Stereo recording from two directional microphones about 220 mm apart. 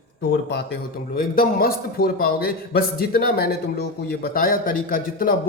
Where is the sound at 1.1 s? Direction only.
40° left (ahead or behind).